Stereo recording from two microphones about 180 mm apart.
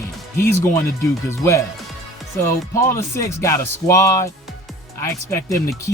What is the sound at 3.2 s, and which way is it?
Speech, 15° left (ahead or behind).